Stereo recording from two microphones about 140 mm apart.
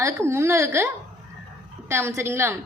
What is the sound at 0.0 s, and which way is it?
Speech, 20° right (ahead or behind).